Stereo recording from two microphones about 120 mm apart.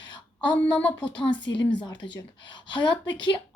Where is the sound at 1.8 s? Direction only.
40° left (ahead or behind).